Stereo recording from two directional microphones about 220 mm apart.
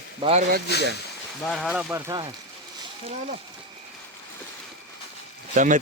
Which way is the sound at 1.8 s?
15° right (ahead or behind).